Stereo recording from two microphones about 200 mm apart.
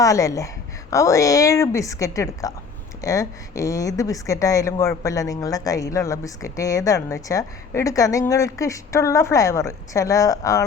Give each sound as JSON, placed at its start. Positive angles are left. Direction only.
{"t": 0.0, "sound": "speech", "side_deg": 15}